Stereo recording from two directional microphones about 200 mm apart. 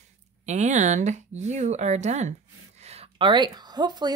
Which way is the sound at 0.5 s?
35° right (ahead or behind).